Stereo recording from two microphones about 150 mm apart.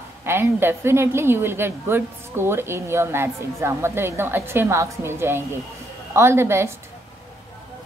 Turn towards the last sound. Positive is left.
turn(degrees=-15)  # may be behind; listen again after turning